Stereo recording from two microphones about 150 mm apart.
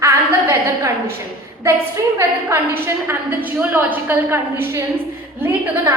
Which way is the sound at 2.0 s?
20° right (ahead or behind).